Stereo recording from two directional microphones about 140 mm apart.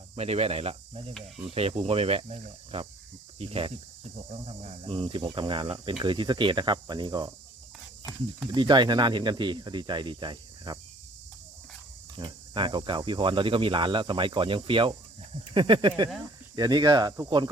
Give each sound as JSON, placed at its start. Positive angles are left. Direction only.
{"t": 0.2, "sound": "speech", "side_deg": -50}
{"t": 12.1, "sound": "speech", "side_deg": -35}